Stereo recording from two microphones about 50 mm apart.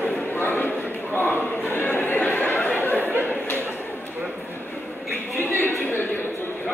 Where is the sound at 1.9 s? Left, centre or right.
Left.